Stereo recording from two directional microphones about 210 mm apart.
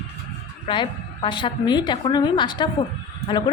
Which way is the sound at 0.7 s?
25° left (ahead or behind).